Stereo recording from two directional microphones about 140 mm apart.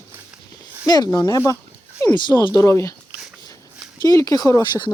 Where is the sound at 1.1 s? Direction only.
20° left (ahead or behind).